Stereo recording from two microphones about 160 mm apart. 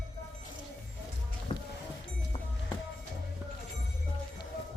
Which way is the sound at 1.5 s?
35° left (ahead or behind).